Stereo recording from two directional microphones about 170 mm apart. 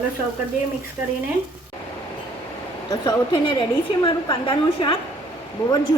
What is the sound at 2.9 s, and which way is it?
A woman's voice, 25° left (ahead or behind).